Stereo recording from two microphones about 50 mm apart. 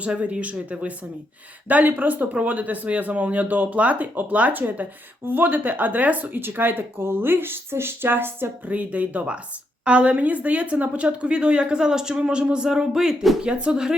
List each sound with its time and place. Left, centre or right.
0.0 s a woman's voice: right
6.4 s speech: right
8.7 s a woman's voice: right; by 13.9 s centre